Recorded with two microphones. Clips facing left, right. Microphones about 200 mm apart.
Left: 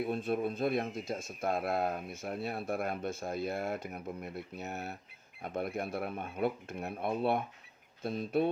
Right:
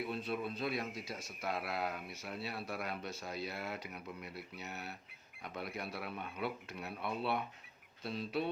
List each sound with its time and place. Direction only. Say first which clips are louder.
0.0 s speech: left 6 dB; 50° left (ahead or behind)